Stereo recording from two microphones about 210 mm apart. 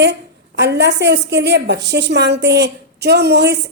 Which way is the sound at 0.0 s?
55° right (ahead or behind).